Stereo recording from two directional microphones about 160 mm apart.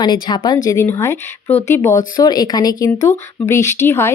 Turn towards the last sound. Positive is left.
turn(degrees=15)  # may be behind; listen again after turning